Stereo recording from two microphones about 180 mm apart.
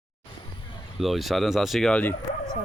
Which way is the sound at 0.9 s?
Centre (ahead or behind).